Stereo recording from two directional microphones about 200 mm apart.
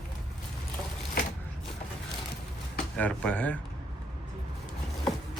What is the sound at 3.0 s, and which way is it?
Speech, 5° left (ahead or behind).